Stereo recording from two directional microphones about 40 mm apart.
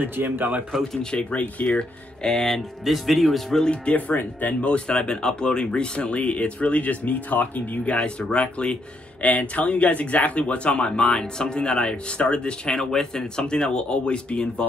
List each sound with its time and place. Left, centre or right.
0.0 s speech: right
1.4 s a man's voice: left
1.8 s speech: centre
3.6 s speech: left
3.9 s speech: left
4.6 s speech: left
7.8 s a man's voice: left
10.9 s speech: centre
12.9 s speech: centre